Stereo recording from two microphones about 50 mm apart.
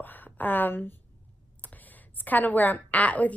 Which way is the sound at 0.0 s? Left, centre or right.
Left.